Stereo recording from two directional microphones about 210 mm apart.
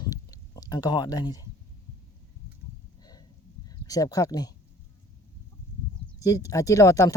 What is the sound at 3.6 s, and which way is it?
Speech, 15° left (ahead or behind).